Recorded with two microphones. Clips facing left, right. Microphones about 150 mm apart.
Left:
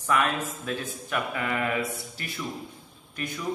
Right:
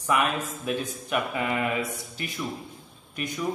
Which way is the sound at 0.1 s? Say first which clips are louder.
Even; 20° right (ahead or behind).